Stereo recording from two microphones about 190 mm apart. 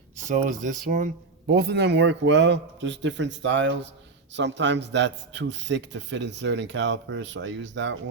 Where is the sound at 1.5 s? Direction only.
60° right (ahead or behind).